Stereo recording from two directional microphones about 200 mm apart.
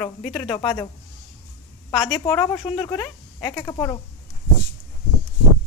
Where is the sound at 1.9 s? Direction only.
20° left (ahead or behind).